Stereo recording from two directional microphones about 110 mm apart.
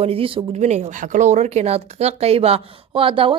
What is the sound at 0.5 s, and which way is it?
Speech, 90° right.